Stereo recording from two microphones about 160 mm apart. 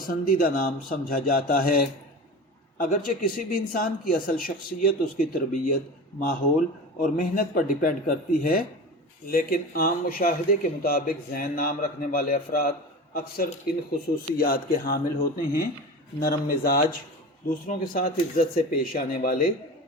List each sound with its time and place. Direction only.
0.1 s speech: 65° left (ahead or behind)
7.0 s speech: 65° left (ahead or behind)